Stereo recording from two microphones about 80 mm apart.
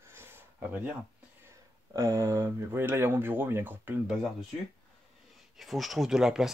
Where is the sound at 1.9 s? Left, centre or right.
Right.